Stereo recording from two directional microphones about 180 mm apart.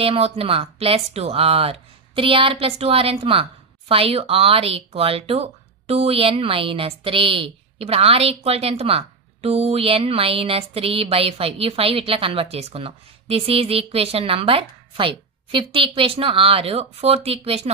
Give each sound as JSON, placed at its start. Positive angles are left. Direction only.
{"t": 0.0, "sound": "speech", "side_deg": -30}